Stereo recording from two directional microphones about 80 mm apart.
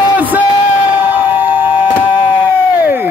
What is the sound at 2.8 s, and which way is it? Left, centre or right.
Crowd, right.